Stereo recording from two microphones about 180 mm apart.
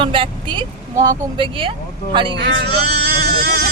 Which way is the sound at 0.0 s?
30° right (ahead or behind).